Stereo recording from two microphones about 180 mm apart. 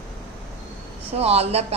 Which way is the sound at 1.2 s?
35° right (ahead or behind).